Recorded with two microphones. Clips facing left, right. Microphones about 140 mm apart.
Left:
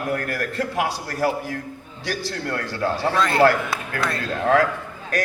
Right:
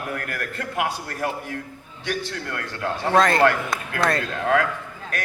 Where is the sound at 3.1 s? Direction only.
40° right (ahead or behind).